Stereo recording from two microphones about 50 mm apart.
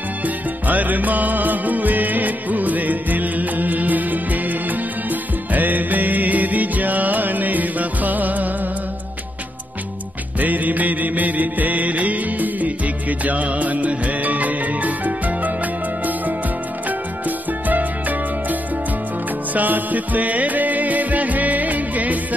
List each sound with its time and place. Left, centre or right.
0.2 s music: right
10.4 s music: right
17.6 s music: right